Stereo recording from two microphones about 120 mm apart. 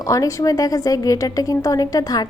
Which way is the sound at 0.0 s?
30° left (ahead or behind).